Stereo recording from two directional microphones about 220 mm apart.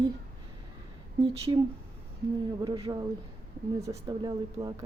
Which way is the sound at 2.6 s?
20° right (ahead or behind).